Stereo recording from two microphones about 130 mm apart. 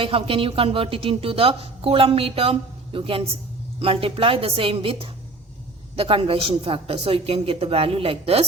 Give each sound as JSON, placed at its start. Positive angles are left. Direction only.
{"t": 0.0, "sound": "speech", "side_deg": -45}